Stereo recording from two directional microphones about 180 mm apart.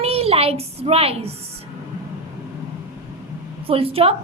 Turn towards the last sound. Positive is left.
turn(degrees=-30)  # may be behind; listen again after turning